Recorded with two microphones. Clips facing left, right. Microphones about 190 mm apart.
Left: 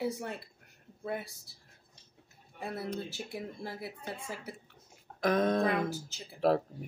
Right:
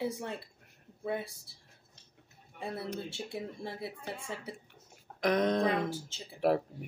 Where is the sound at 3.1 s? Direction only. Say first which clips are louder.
Right 1 dB; 25° right (ahead or behind).